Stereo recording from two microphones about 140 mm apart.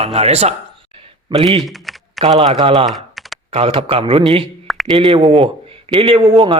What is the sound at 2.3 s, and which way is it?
Speech, 45° right (ahead or behind).